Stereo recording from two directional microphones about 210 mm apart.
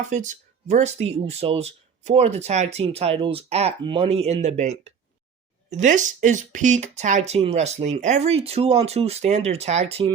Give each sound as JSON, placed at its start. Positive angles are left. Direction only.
{"t": 0.1, "sound": "speech", "side_deg": -35}